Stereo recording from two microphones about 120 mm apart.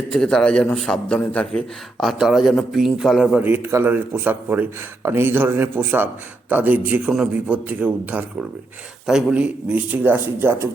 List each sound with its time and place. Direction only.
0.1 s a man's voice: 5° left (ahead or behind)
3.4 s speech: 15° right (ahead or behind)